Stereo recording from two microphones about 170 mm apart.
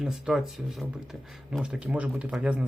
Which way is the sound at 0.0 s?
Centre (ahead or behind).